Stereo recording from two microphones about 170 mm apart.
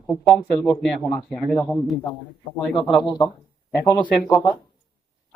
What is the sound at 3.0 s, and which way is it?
Speech, 25° left (ahead or behind).